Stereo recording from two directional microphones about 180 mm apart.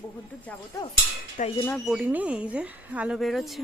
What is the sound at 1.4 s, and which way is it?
Speech, 45° left (ahead or behind).